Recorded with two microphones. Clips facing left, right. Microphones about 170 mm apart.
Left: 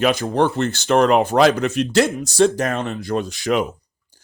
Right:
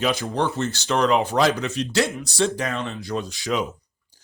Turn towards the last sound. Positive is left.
turn(degrees=55)  # may be behind; listen again after turning